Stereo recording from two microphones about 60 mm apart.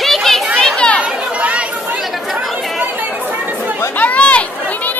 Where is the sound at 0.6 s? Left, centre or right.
Centre.